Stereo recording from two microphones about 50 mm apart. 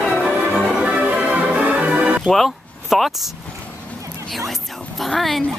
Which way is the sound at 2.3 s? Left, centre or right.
Centre.